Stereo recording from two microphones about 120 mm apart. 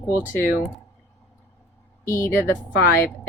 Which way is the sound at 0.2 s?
20° left (ahead or behind).